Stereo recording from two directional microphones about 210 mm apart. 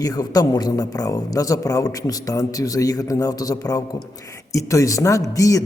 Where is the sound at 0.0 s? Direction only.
20° left (ahead or behind).